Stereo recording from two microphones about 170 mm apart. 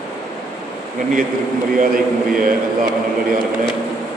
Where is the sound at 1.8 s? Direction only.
55° right (ahead or behind).